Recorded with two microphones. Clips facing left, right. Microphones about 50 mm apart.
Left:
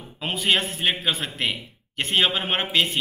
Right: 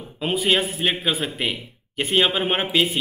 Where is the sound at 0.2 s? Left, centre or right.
Centre.